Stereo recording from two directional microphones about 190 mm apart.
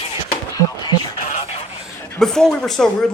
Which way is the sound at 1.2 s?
35° left (ahead or behind).